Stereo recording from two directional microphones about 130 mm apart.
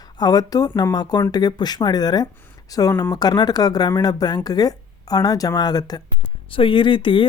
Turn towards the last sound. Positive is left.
turn(degrees=40)  # may be behind; listen again after turning